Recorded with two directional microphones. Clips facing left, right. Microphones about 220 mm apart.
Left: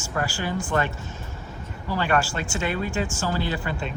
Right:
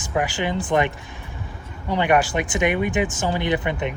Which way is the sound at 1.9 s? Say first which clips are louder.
Right 5 dB; 20° right (ahead or behind).